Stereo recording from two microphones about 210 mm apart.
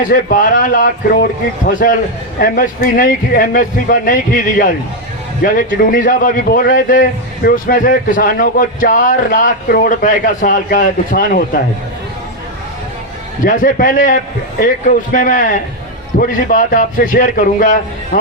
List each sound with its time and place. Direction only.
0.0 s a man's voice: 40° left (ahead or behind)
13.4 s a man's voice: 40° left (ahead or behind)